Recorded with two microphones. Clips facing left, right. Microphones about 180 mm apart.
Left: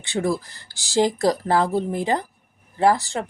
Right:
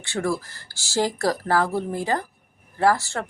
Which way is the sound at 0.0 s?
20° left (ahead or behind).